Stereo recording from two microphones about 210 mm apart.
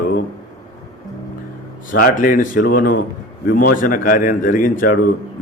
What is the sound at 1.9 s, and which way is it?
A man's voice, 40° left (ahead or behind).